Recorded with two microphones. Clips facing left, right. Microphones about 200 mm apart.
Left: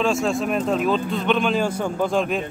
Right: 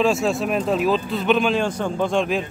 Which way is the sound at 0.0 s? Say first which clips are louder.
Right 1 dB; 5° right (ahead or behind).